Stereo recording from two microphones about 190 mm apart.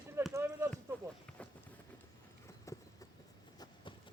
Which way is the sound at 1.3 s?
5° left (ahead or behind).